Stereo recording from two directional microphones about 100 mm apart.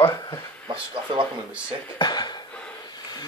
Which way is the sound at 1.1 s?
55° right (ahead or behind).